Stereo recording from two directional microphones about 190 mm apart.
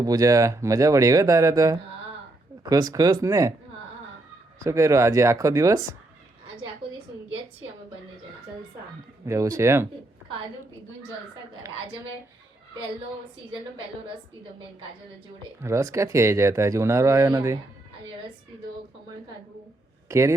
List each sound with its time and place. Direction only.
0.0 s speech: 20° right (ahead or behind)
4.6 s speech: 15° right (ahead or behind)
9.2 s speech: 15° right (ahead or behind)
15.6 s speech: 15° right (ahead or behind)
20.1 s speech: 15° right (ahead or behind)